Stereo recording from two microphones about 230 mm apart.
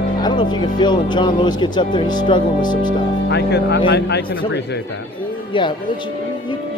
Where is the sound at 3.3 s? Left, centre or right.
Left.